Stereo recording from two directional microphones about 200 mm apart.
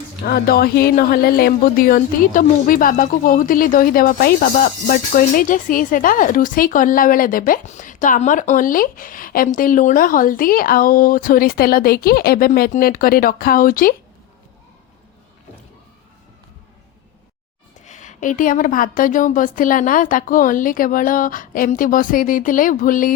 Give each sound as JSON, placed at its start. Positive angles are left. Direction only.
{"t": 0.3, "sound": "speech", "side_deg": 50}
{"t": 17.8, "sound": "a woman's voice", "side_deg": 35}